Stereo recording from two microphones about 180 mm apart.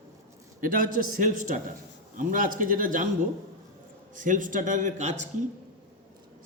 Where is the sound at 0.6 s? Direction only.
50° right (ahead or behind).